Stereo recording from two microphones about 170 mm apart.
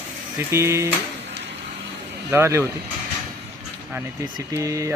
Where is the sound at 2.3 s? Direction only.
15° right (ahead or behind).